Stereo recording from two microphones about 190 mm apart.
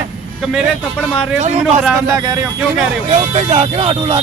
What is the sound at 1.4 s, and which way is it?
Speech, 35° right (ahead or behind).